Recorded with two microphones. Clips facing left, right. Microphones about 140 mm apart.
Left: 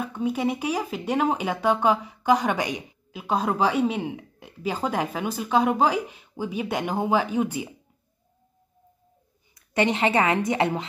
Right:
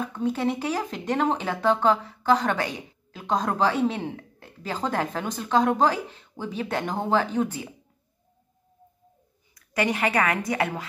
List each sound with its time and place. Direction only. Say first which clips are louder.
0.0 s speech: even; 10° left (ahead or behind)
9.6 s a woman's voice: left 2 dB; 25° left (ahead or behind)